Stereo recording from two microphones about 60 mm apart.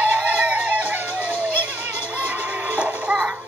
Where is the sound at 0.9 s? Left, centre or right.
Right.